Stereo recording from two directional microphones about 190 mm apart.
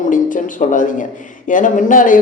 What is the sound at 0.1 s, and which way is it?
A man's voice, 45° left (ahead or behind).